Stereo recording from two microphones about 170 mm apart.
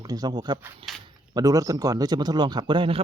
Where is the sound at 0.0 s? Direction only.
25° right (ahead or behind).